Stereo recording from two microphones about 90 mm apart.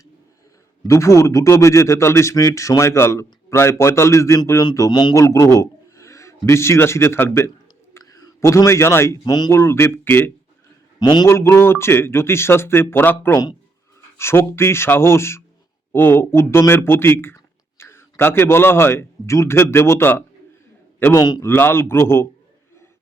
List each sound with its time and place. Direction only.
0.9 s a man's voice: 35° left (ahead or behind)
4.9 s a man's voice: 55° left (ahead or behind)
5.1 s a man's voice: 35° left (ahead or behind)
9.2 s speech: 50° left (ahead or behind)
9.5 s speech: 30° left (ahead or behind)
11.0 s a man's voice: 60° left (ahead or behind)
11.3 s speech: 30° left (ahead or behind)
21.2 s speech: 45° left (ahead or behind)
21.4 s speech: 25° left (ahead or behind)